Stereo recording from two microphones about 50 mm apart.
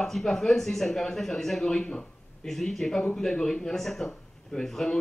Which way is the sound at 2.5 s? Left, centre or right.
Centre.